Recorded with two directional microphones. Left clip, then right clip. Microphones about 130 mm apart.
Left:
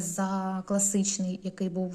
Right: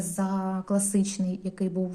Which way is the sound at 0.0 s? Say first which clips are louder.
Even; 25° left (ahead or behind).